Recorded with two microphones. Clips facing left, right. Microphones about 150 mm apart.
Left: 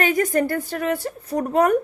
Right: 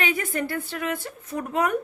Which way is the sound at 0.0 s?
40° left (ahead or behind).